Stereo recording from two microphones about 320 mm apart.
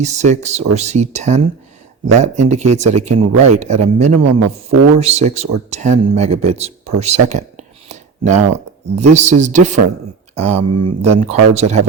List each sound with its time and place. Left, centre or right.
0.0 s a man's voice: right
10.6 s speech: right
11.0 s a man's voice: centre